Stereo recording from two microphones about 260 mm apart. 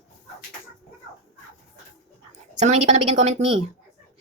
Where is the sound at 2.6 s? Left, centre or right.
Right.